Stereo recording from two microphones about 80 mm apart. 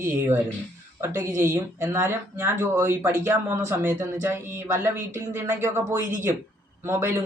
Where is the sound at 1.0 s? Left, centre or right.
Right.